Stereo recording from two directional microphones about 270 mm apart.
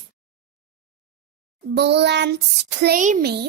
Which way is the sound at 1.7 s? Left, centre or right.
Right.